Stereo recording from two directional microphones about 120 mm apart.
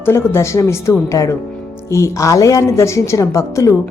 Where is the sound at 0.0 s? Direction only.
20° left (ahead or behind).